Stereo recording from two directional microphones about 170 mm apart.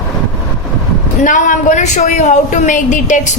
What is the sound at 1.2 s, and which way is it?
A woman's voice, 50° left (ahead or behind).